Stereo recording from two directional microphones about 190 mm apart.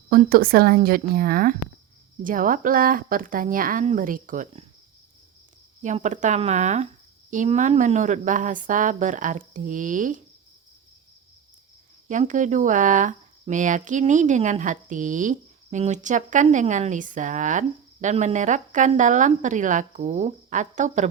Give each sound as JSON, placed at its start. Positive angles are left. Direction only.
{"t": 0.1, "sound": "speech", "side_deg": -50}
{"t": 5.8, "sound": "speech", "side_deg": -40}
{"t": 12.0, "sound": "speech", "side_deg": -40}